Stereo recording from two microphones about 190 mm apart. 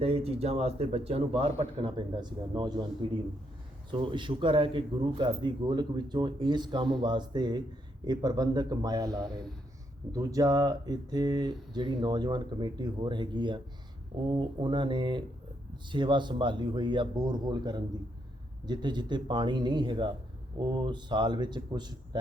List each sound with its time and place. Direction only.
0.0 s a man's voice: 30° right (ahead or behind)